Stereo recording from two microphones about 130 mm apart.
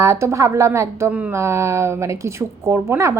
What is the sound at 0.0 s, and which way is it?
Speech, 20° right (ahead or behind).